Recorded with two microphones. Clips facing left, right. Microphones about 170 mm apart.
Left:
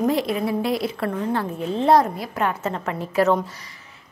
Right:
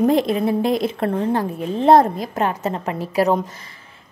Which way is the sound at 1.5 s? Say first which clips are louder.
Right 4 dB; 10° right (ahead or behind).